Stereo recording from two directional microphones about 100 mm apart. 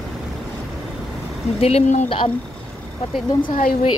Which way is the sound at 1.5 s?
80° left.